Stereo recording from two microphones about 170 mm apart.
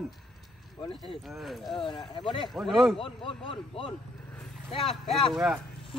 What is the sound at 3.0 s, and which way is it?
Speech, 30° left (ahead or behind).